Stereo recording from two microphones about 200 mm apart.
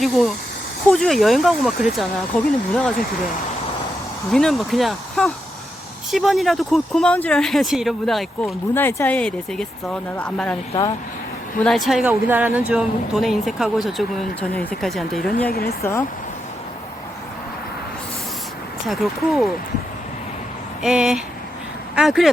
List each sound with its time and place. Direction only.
0.0 s speech: centre (ahead or behind)
4.3 s speech: centre (ahead or behind)
8.7 s speech: 10° left (ahead or behind)
11.6 s speech: centre (ahead or behind)
15.4 s speech: 50° left (ahead or behind)
15.8 s speech: 15° left (ahead or behind)
18.9 s speech: centre (ahead or behind)
20.8 s speech: 5° right (ahead or behind)